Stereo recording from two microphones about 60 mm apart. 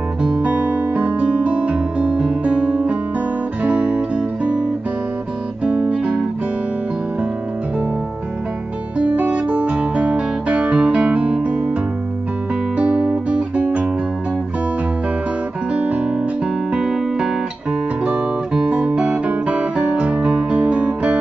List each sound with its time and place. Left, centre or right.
0.2 s music: centre
5.7 s guitar: right
8.9 s guitar: right
12.7 s guitar: right
15.7 s guitar: right
16.7 s music: centre
18.0 s guitar: centre